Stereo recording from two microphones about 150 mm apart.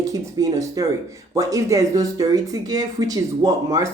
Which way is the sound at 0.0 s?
25° right (ahead or behind).